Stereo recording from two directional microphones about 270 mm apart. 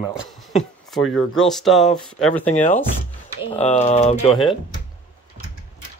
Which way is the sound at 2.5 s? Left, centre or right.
Left.